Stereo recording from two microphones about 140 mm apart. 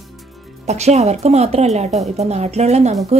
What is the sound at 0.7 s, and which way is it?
A woman's voice, 50° right (ahead or behind).